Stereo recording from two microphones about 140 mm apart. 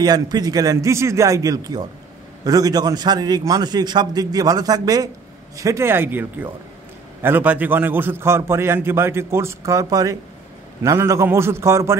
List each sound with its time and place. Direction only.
0.0 s a man's voice: 30° right (ahead or behind)